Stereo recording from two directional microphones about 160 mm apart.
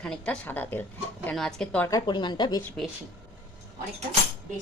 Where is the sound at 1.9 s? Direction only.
25° left (ahead or behind).